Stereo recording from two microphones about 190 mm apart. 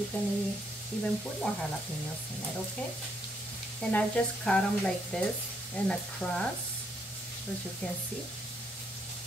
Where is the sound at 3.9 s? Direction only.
5° left (ahead or behind).